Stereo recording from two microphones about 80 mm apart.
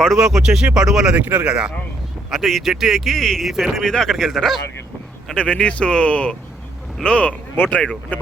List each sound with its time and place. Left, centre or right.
0.0 s speech: centre
1.1 s speech: right
2.3 s speech: centre
5.3 s speech: centre